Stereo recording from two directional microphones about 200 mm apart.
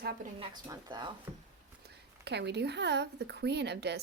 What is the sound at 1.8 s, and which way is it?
Speech, 55° right (ahead or behind).